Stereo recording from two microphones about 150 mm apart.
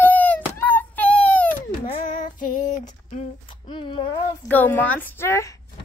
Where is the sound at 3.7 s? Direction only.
35° left (ahead or behind).